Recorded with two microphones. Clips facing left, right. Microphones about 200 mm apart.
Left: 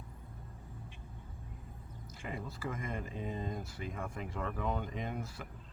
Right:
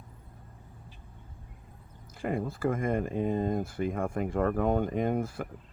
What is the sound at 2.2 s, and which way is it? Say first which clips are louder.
Speech: right 12 dB; 55° right (ahead or behind).